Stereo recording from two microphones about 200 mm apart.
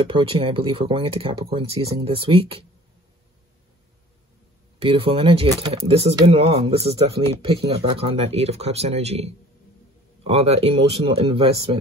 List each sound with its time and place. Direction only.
0.0 s speech: 25° right (ahead or behind)
4.7 s speech: 25° right (ahead or behind)